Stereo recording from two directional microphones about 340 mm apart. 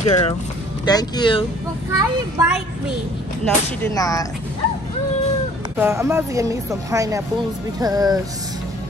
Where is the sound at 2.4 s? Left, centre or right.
Centre.